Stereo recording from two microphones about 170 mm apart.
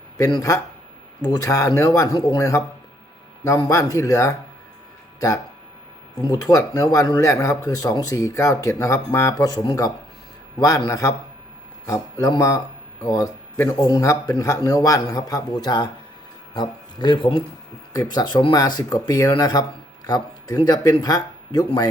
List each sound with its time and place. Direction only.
0.2 s speech: 25° left (ahead or behind)
6.2 s speech: 20° left (ahead or behind)
12.2 s speech: 20° left (ahead or behind)